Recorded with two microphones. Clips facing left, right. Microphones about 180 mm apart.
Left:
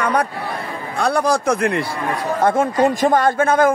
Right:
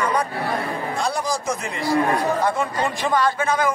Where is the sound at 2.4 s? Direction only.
45° left (ahead or behind).